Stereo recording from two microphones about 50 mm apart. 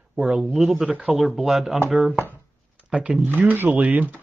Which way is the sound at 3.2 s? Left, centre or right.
Right.